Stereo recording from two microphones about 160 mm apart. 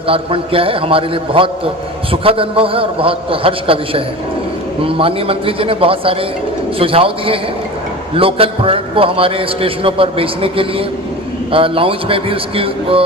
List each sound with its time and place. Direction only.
0.1 s a man's voice: 35° right (ahead or behind)